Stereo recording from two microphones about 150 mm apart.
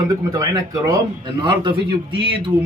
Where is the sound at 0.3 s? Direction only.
25° right (ahead or behind).